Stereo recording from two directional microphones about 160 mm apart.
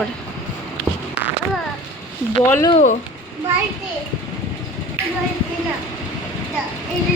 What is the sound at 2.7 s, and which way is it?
Speech, 50° left (ahead or behind).